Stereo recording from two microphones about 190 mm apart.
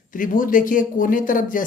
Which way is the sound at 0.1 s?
45° left (ahead or behind).